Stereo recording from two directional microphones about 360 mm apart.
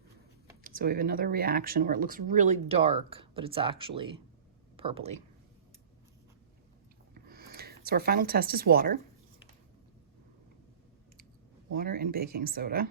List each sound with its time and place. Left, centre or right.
0.6 s speech: right
7.1 s a sound: right
7.9 s speech: right
11.8 s speech: right